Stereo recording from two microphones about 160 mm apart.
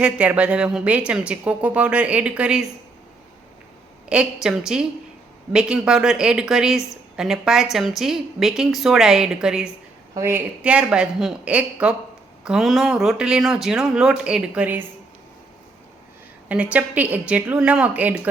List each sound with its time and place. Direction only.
0.0 s a woman's voice: 10° right (ahead or behind)
4.1 s a woman's voice: 5° right (ahead or behind)
16.5 s a woman's voice: 10° right (ahead or behind)